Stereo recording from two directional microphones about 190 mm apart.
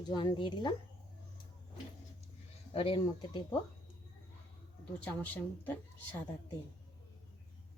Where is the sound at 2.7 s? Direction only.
30° left (ahead or behind).